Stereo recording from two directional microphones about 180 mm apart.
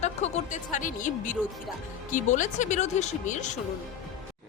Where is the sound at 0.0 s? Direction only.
40° left (ahead or behind).